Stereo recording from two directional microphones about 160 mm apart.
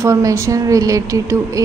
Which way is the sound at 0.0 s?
20° right (ahead or behind).